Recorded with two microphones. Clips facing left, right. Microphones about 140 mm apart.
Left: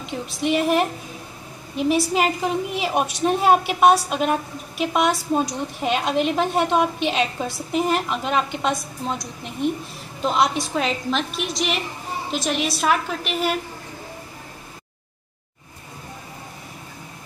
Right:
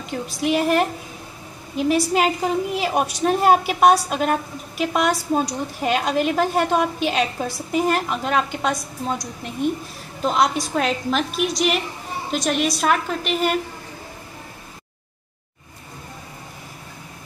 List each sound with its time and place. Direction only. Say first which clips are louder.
0.1 s a woman's voice: right 1 dB; centre (ahead or behind)